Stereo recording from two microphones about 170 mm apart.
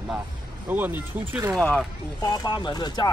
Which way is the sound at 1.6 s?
5° left (ahead or behind).